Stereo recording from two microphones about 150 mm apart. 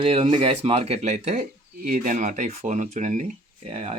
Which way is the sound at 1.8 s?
65° right (ahead or behind).